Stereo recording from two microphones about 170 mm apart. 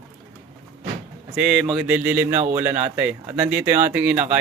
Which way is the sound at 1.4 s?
Centre (ahead or behind).